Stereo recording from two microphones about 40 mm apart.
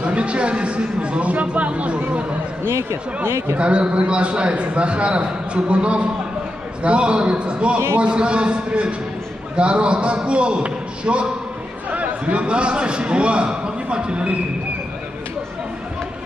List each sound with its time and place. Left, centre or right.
0.0 s speech: right
3.5 s a man's voice: right